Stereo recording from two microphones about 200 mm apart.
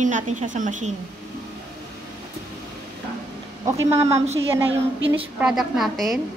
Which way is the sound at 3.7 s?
15° right (ahead or behind).